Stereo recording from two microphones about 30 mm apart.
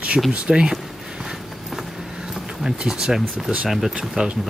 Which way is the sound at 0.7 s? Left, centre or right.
Centre.